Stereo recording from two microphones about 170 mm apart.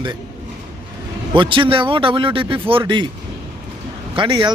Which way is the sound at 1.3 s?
30° right (ahead or behind).